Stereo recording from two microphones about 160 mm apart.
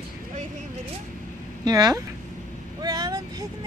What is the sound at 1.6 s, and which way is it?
Speech, 25° right (ahead or behind).